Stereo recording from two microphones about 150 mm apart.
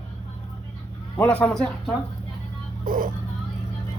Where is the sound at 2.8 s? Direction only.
65° right (ahead or behind).